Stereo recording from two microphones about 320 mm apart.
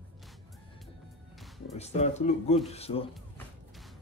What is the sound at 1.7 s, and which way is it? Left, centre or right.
Speech, centre.